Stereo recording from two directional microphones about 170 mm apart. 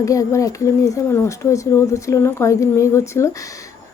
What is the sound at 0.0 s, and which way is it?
Speech, 20° left (ahead or behind).